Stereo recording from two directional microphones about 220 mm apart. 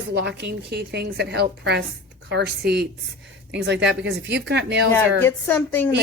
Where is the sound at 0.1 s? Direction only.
50° right (ahead or behind).